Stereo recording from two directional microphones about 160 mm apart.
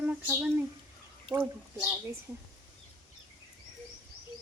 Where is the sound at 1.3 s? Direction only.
25° right (ahead or behind).